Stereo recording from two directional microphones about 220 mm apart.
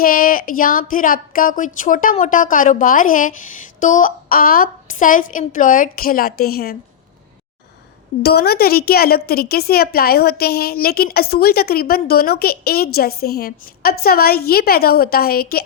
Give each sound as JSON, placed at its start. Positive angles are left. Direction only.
{"t": 0.0, "sound": "speech", "side_deg": 40}
{"t": 8.2, "sound": "a woman's voice", "side_deg": 45}